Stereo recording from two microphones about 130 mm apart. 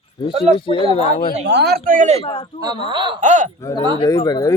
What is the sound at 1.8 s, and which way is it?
Speech, 90° right.